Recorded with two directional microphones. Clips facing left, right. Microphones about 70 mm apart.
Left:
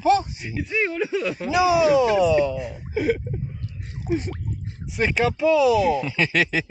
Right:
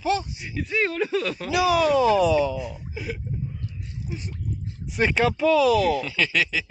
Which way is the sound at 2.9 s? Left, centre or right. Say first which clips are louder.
Left 10 dB; left.